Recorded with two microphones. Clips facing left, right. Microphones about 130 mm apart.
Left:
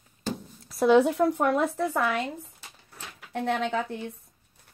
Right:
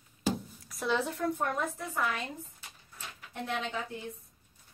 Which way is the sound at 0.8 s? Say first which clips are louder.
Left 11 dB; 65° left (ahead or behind).